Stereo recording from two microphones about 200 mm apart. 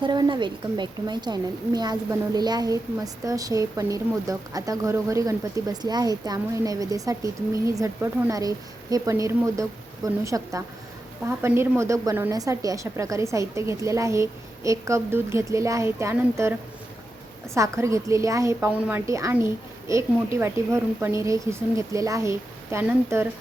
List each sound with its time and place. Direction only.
0.0 s a woman's voice: 20° right (ahead or behind)